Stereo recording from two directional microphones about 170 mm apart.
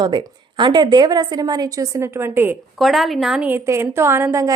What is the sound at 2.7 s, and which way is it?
A woman's voice, centre (ahead or behind).